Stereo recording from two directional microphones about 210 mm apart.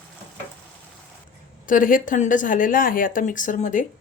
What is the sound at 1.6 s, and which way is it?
A woman's voice, 40° left (ahead or behind).